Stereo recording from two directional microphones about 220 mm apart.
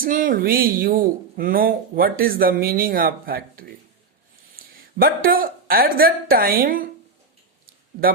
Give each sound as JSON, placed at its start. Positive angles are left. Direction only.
{"t": 0.0, "sound": "speech", "side_deg": -40}